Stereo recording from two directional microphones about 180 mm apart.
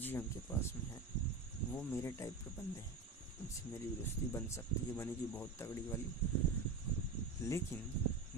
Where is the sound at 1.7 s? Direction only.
15° left (ahead or behind).